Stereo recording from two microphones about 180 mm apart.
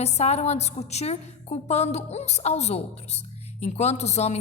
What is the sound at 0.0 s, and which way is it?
A woman's voice, 35° left (ahead or behind).